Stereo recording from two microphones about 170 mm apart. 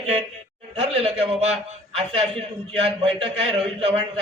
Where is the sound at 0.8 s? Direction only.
35° right (ahead or behind).